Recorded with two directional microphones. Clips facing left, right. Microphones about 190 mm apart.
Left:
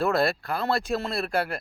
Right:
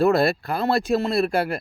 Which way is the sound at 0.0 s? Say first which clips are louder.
Right 5 dB; 10° right (ahead or behind).